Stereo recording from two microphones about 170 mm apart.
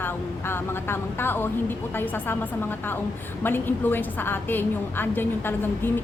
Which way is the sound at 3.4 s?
10° left (ahead or behind).